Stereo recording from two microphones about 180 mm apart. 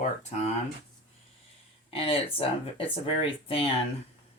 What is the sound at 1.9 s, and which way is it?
Speech, 30° left (ahead or behind).